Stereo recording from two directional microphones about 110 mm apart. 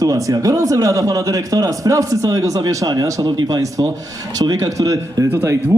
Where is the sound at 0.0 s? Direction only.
30° right (ahead or behind).